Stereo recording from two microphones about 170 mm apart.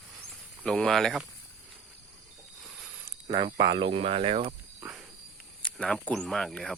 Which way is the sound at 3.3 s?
30° right (ahead or behind).